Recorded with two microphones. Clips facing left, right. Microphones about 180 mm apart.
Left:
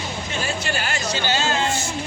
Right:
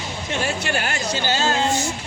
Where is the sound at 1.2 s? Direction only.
45° right (ahead or behind).